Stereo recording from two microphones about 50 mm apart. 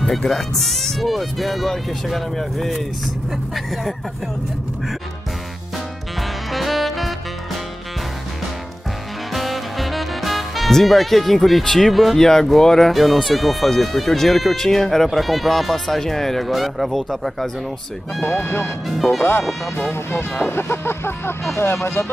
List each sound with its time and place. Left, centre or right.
0.0 s speech: centre
6.5 s music: centre
9.3 s speech: centre
18.2 s speech: left